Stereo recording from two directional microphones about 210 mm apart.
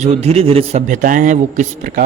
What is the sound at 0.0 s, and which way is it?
Speech, 30° right (ahead or behind).